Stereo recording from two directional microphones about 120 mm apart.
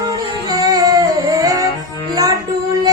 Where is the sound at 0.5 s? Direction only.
30° right (ahead or behind).